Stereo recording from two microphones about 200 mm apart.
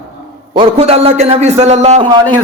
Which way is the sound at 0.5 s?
30° right (ahead or behind).